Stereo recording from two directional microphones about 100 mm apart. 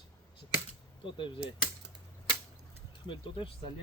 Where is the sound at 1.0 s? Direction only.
55° left (ahead or behind).